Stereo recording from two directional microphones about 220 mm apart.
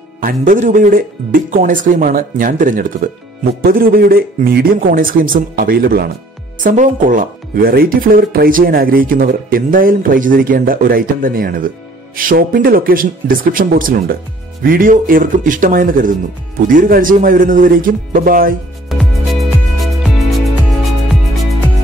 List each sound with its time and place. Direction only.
0.2 s speech: 40° right (ahead or behind)
18.9 s music: centre (ahead or behind)